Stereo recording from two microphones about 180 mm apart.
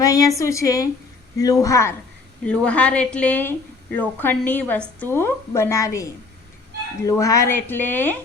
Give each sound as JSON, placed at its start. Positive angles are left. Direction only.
{"t": 0.0, "sound": "a woman's voice", "side_deg": 20}